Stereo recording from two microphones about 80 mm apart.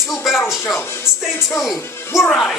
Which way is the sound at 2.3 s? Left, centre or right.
Centre.